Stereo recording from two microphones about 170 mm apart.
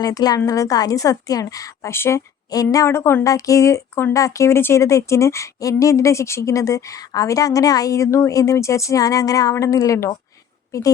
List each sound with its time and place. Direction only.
0.0 s a woman's voice: 20° left (ahead or behind)